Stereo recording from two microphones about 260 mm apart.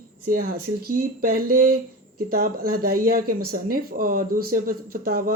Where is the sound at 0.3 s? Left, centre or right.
Right.